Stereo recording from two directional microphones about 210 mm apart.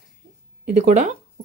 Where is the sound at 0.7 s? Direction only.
35° right (ahead or behind).